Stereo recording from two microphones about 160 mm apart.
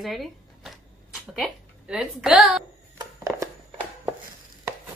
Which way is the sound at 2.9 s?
20° right (ahead or behind).